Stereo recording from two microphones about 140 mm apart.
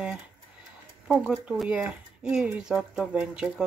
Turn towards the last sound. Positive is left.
turn(degrees=-5)  # may be behind; listen again after turning